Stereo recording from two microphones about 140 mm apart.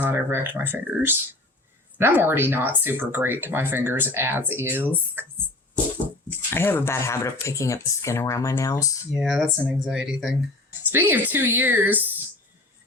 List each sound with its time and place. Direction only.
0.0 s speech: 15° right (ahead or behind)
6.5 s speech: 15° left (ahead or behind)
9.6 s speech: 5° right (ahead or behind)